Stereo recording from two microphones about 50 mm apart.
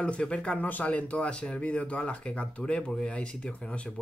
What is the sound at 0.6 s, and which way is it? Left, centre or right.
Speech, left.